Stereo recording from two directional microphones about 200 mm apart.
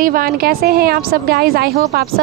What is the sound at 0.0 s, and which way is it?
Speech, 45° right (ahead or behind).